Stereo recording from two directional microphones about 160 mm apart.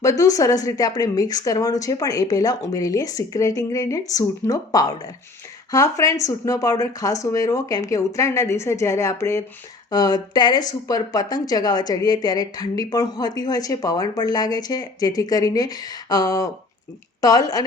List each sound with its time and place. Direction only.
0.0 s a woman's voice: 20° left (ahead or behind)